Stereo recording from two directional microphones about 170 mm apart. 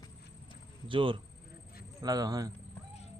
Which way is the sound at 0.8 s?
30° right (ahead or behind).